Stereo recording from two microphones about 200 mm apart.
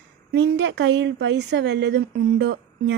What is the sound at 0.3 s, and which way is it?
Speech, 60° right (ahead or behind).